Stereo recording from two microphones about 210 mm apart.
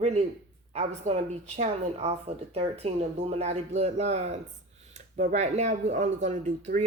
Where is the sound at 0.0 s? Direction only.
30° right (ahead or behind).